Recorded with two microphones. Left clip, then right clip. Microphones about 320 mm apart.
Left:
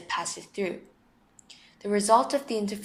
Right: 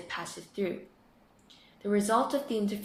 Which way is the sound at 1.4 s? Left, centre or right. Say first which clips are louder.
Left 2 dB; centre.